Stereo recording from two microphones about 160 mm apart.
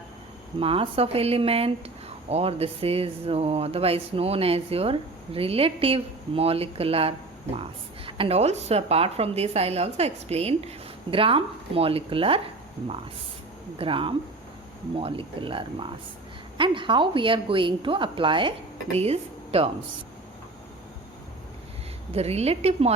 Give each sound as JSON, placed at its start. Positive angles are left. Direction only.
{"t": 0.6, "sound": "speech", "side_deg": -35}
{"t": 13.7, "sound": "speech", "side_deg": -35}
{"t": 22.1, "sound": "speech", "side_deg": -40}